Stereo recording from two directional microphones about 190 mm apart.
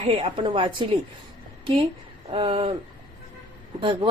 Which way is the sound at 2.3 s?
25° right (ahead or behind).